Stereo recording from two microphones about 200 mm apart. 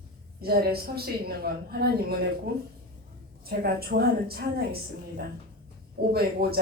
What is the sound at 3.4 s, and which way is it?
A woman's voice, 50° right (ahead or behind).